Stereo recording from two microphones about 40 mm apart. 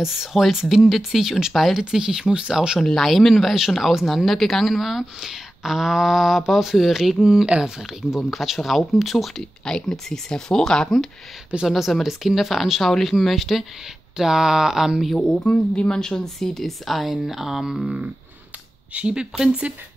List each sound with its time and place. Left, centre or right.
0.0 s a woman's voice: centre
1.9 s speech: centre
3.0 s a woman's voice: centre
8.2 s a woman's voice: centre
9.7 s speech: centre
11.6 s a woman's voice: centre
15.3 s a woman's voice: left; by 17.9 s centre
19.1 s speech: centre